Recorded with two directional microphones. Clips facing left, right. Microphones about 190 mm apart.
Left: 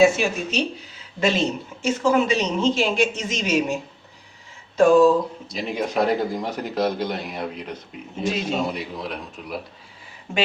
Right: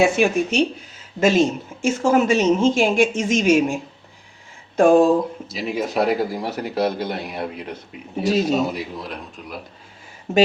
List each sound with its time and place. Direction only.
0.0 s speech: 55° right (ahead or behind)
4.8 s speech: 55° right (ahead or behind)
5.5 s speech: 5° right (ahead or behind)
8.2 s a man's voice: 40° right (ahead or behind)
8.7 s a man's voice: centre (ahead or behind)
10.3 s a man's voice: 40° right (ahead or behind)